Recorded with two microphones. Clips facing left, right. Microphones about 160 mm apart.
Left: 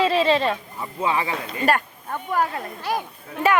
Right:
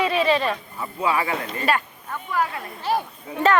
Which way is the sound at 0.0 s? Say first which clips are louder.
Left 1 dB; 30° left (ahead or behind).